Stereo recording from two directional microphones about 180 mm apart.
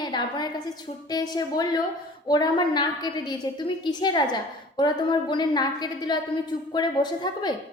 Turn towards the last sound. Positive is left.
turn(degrees=25)  # may be behind; listen again after turning